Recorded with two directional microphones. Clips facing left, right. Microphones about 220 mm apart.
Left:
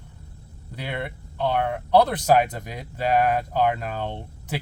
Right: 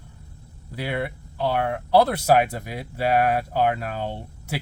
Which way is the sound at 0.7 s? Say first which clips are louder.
Right 4 dB; 5° right (ahead or behind).